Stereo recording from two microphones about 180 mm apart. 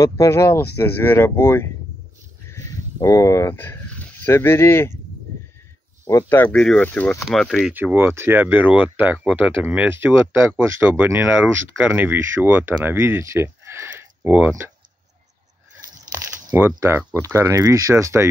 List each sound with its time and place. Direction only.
0.0 s speech: 15° left (ahead or behind)
2.5 s a sound: 20° left (ahead or behind)
6.0 s speech: 15° left (ahead or behind)
7.7 s speech: 10° right (ahead or behind)
16.2 s speech: 15° right (ahead or behind)